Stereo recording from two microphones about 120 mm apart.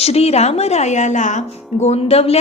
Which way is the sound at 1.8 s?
60° left (ahead or behind).